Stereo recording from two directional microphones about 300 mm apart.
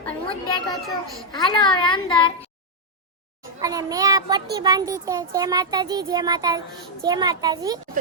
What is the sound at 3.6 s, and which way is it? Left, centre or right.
A child's voice, centre.